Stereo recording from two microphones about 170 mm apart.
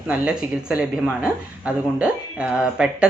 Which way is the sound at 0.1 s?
5° right (ahead or behind).